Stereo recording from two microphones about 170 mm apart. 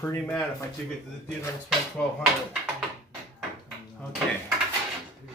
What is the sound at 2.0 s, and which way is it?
Speech, 10° left (ahead or behind).